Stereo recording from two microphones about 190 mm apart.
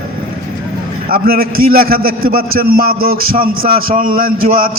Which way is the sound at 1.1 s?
50° right (ahead or behind).